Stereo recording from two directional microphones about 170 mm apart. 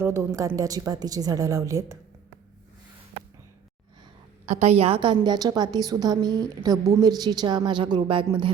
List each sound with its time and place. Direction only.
0.0 s a woman's voice: 15° right (ahead or behind)
4.4 s a woman's voice: 40° right (ahead or behind)